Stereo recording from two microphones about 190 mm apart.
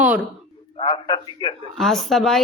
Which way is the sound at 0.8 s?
25° left (ahead or behind).